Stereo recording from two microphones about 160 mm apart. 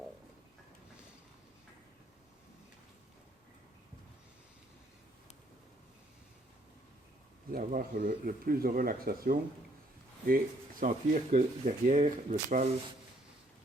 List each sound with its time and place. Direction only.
7.5 s speech: 60° right (ahead or behind)